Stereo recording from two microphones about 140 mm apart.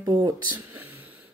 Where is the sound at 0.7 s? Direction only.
15° right (ahead or behind).